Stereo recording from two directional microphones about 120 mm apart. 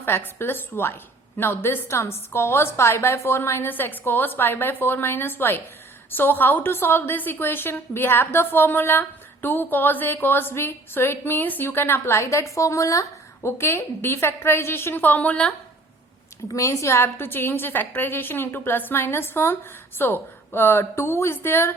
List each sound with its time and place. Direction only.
0.3 s a woman's voice: 20° left (ahead or behind)
16.5 s a woman's voice: 25° left (ahead or behind)